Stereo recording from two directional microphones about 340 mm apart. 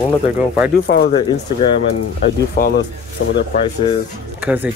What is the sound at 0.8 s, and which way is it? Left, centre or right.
Speech, left.